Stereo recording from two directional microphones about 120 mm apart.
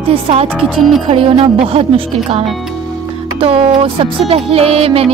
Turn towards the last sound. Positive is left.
turn(degrees=-55)  # may be behind; listen again after turning